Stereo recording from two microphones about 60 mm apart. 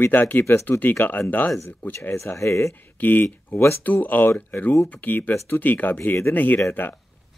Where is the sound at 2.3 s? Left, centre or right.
Left.